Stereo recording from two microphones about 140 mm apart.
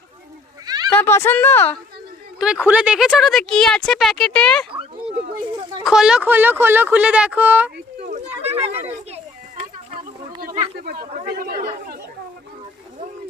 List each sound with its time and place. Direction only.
0.6 s cat: 30° right (ahead or behind)
0.9 s a woman's voice: 15° left (ahead or behind)
2.4 s speech: 5° right (ahead or behind)
5.8 s speech: 5° right (ahead or behind)
8.0 s a sound: 55° right (ahead or behind)
10.4 s speech: 75° right (ahead or behind)